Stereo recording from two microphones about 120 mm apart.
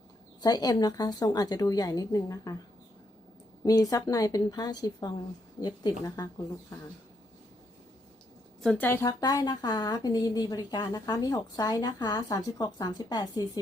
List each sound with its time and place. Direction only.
0.4 s a woman's voice: 35° left (ahead or behind)
3.6 s a woman's voice: 30° left (ahead or behind)
8.8 s speech: 20° left (ahead or behind)
9.2 s a woman's voice: 35° left (ahead or behind)